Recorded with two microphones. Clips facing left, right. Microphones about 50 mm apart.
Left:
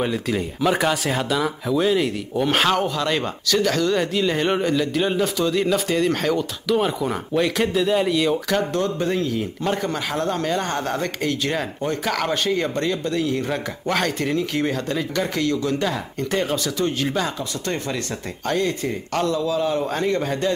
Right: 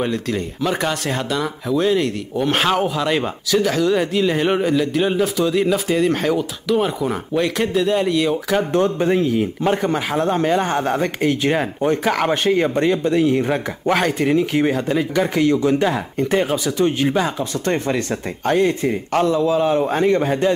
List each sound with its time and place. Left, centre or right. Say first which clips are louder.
0.0 s speech: right 1 dB; centre
8.5 s speech: right 4 dB; right